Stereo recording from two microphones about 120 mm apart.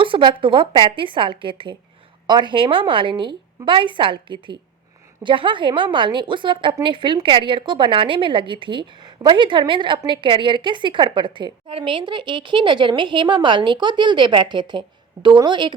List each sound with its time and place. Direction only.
0.0 s a woman's voice: 45° right (ahead or behind)